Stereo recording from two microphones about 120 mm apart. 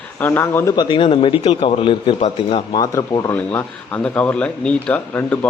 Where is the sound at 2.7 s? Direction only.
35° left (ahead or behind).